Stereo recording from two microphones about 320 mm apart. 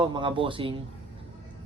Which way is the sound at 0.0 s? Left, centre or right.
Centre.